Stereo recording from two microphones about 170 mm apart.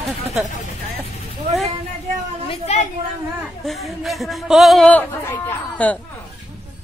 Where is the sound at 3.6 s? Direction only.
Centre (ahead or behind).